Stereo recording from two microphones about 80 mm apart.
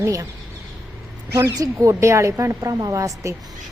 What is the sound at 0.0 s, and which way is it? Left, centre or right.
Speech, right.